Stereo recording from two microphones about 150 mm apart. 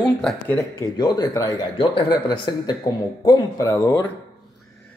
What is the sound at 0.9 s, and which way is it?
Speech, 30° left (ahead or behind).